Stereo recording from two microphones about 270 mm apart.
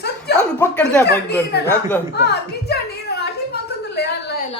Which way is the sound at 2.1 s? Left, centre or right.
Left.